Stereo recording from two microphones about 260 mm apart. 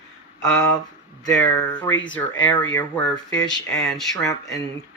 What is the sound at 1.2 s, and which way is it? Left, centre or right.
Speech, centre.